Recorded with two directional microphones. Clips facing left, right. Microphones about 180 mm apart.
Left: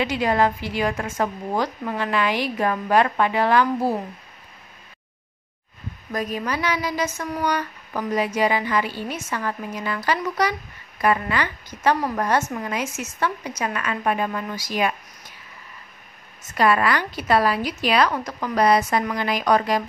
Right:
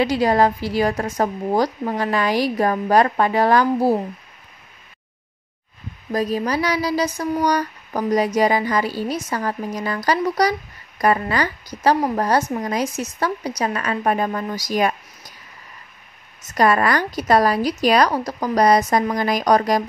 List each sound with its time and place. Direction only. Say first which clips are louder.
0.0 s a woman's voice: right 4 dB; 35° right (ahead or behind)
6.1 s a woman's voice: right 5 dB; 35° right (ahead or behind)
16.4 s a woman's voice: right 2 dB; 40° right (ahead or behind)